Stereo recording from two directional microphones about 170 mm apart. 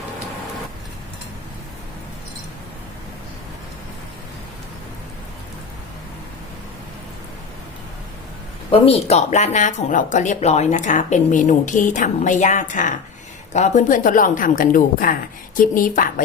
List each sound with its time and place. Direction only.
8.7 s speech: 35° left (ahead or behind); by 16.2 s 55° left (ahead or behind)